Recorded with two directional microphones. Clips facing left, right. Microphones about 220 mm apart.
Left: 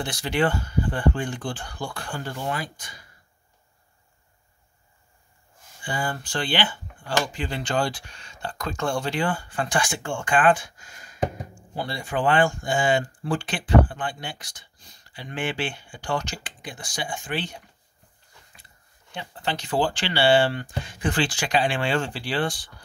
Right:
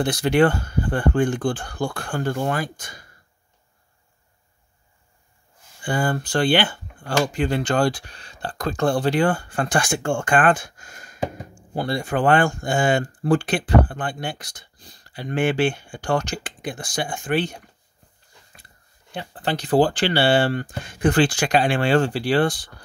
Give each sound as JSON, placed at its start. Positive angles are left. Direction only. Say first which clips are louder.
{"t": 0.0, "sound": "speech", "louder": "right 7 dB", "side_deg": -45}
{"t": 5.9, "sound": "speech", "louder": "right 6 dB", "side_deg": -50}
{"t": 9.2, "sound": "speech", "louder": "right 5 dB", "side_deg": -50}
{"t": 14.8, "sound": "speech", "louder": "right 7 dB", "side_deg": -35}
{"t": 19.1, "sound": "speech", "louder": "right 3 dB", "side_deg": -35}
{"t": 20.0, "sound": "speech", "louder": "right 2 dB", "side_deg": -55}